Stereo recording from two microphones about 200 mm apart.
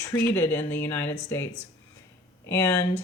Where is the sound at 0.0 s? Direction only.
15° left (ahead or behind).